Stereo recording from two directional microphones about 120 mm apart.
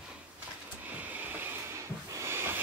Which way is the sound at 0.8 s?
15° right (ahead or behind).